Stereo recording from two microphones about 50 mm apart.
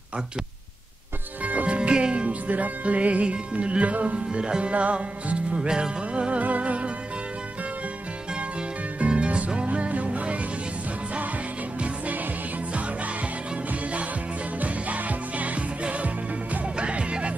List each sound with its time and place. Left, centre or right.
1.4 s music: right
1.8 s music: centre
9.0 s music: right
14.6 s music: right